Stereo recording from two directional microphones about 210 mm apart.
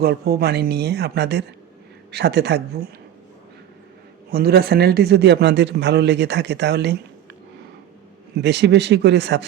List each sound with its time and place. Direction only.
0.0 s a man's voice: 50° right (ahead or behind)
4.3 s a man's voice: 50° right (ahead or behind)
8.4 s a man's voice: 55° right (ahead or behind)